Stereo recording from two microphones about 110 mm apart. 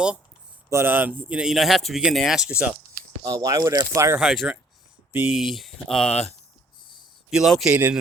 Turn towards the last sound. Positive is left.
turn(degrees=-15)  # may be behind; listen again after turning